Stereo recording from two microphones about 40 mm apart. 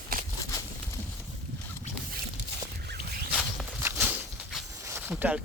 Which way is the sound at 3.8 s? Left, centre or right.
Right.